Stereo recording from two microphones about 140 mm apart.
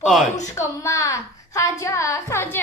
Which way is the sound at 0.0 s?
Centre (ahead or behind).